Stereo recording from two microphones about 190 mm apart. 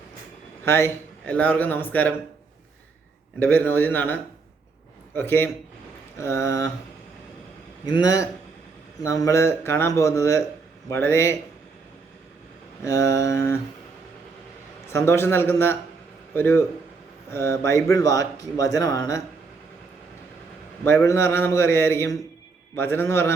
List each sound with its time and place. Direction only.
0.6 s speech: 15° left (ahead or behind)
3.4 s speech: 10° left (ahead or behind)
7.9 s a man's voice: 20° left (ahead or behind)
12.8 s speech: 15° left (ahead or behind)
14.9 s speech: 15° left (ahead or behind)
20.8 s speech: 15° left (ahead or behind)